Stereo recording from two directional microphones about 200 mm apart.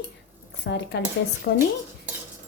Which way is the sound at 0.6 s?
55° left (ahead or behind).